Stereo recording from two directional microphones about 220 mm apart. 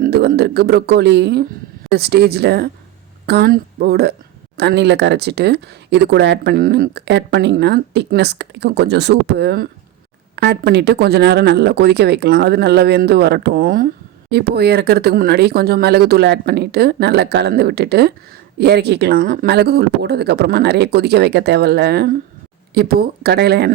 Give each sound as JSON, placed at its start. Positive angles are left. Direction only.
{"t": 0.0, "sound": "speech", "side_deg": -45}